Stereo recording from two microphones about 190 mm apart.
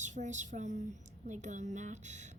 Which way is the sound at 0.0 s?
40° right (ahead or behind).